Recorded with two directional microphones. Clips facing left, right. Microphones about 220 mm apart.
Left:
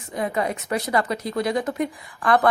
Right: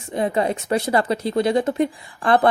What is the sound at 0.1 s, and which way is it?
Speech, 30° right (ahead or behind).